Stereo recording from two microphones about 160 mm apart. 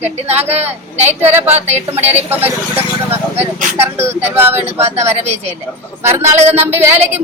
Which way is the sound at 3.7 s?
15° right (ahead or behind).